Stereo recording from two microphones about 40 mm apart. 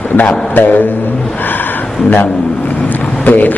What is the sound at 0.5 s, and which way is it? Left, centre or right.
Speech, left.